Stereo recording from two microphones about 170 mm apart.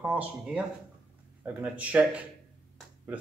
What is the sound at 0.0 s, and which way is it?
Speech, 5° right (ahead or behind).